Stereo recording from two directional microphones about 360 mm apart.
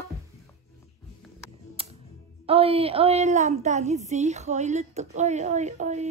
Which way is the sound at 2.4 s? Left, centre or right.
Centre.